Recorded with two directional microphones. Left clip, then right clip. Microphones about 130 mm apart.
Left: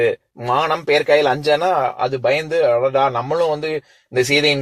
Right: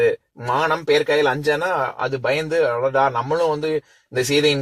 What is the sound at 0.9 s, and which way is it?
A man's voice, 45° left (ahead or behind).